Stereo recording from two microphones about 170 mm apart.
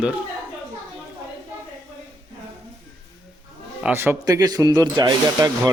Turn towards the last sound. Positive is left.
turn(degrees=-25)  # may be behind; listen again after turning